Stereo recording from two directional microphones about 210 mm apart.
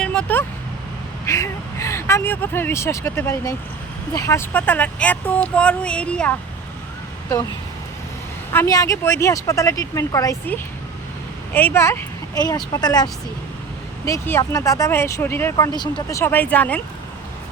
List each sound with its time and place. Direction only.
0.0 s vehicle: 5° left (ahead or behind)
1.2 s speech: 15° left (ahead or behind)
8.5 s speech: 15° left (ahead or behind)